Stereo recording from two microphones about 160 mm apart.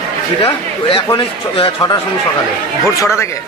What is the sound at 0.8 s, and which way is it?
Speech, 35° left (ahead or behind).